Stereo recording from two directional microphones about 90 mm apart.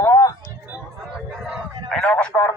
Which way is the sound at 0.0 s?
40° left (ahead or behind).